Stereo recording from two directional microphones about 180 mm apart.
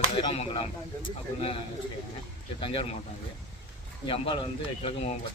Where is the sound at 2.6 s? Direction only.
30° left (ahead or behind).